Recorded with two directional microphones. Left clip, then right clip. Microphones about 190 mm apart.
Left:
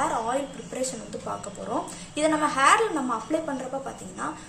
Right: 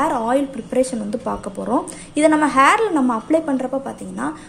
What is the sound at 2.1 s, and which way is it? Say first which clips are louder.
A woman's voice: right 9 dB; 45° right (ahead or behind).